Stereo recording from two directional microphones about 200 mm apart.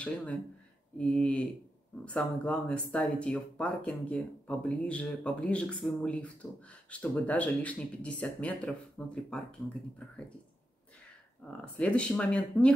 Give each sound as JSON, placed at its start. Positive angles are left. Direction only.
{"t": 0.9, "sound": "speech", "side_deg": 5}
{"t": 11.5, "sound": "speech", "side_deg": 5}